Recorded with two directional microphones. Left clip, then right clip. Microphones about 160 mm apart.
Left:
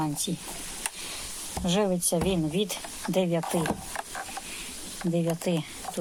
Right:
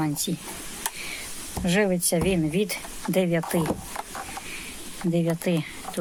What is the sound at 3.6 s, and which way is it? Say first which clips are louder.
Speech: right 2 dB; 20° left (ahead or behind).